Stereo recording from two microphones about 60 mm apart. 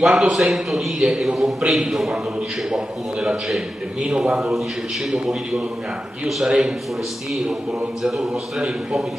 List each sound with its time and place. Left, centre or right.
0.0 s a man's voice: centre
3.4 s a man's voice: centre
6.2 s a man's voice: centre
8.0 s a man's voice: centre